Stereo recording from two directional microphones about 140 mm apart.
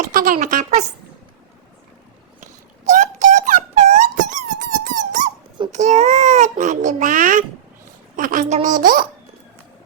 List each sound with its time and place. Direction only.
0.0 s a woman's voice: 75° right (ahead or behind); by 0.9 s 55° right (ahead or behind)
2.4 s a sound: 65° right (ahead or behind)
5.7 s a child's voice: 60° right (ahead or behind); by 9.0 s 75° right (ahead or behind)